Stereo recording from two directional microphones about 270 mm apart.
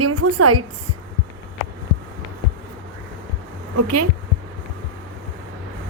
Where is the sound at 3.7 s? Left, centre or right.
Right.